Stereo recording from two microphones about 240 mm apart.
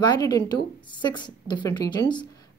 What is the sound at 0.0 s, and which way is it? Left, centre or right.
A woman's voice, centre.